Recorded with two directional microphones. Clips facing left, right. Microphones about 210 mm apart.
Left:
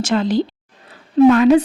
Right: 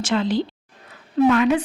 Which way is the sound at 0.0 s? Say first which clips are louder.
Left 4 dB; 40° left (ahead or behind).